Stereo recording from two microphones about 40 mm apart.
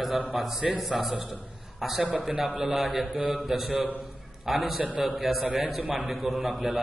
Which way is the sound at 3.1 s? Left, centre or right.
Right.